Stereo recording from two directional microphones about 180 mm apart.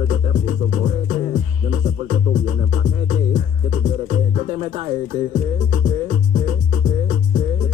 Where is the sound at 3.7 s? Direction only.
45° right (ahead or behind).